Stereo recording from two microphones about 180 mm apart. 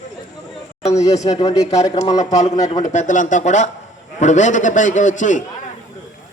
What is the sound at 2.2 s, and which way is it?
Speech, 20° left (ahead or behind).